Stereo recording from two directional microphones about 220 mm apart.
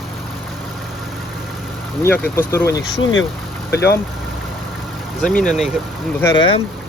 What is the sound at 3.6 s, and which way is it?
Speech, 45° left (ahead or behind).